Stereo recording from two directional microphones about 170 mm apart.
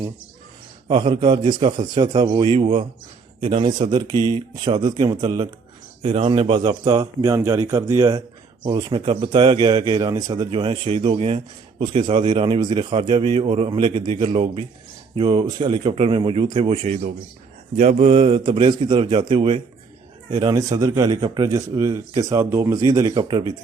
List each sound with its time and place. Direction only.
0.9 s speech: 30° right (ahead or behind)
6.0 s speech: 35° right (ahead or behind)
16.8 s speech: 45° right (ahead or behind)
20.4 s speech: 20° right (ahead or behind)